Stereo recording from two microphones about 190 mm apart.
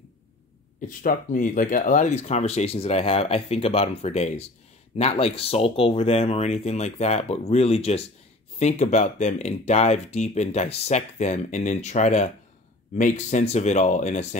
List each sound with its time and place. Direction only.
0.7 s speech: 40° left (ahead or behind)